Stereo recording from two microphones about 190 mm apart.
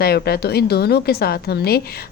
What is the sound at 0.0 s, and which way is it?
A woman's voice, 55° left (ahead or behind).